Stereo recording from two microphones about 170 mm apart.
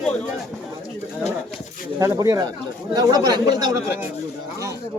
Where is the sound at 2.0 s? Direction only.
20° right (ahead or behind).